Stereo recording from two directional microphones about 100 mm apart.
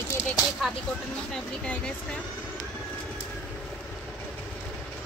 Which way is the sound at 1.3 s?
10° left (ahead or behind).